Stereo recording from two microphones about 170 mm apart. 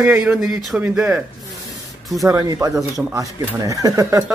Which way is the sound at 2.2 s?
20° right (ahead or behind).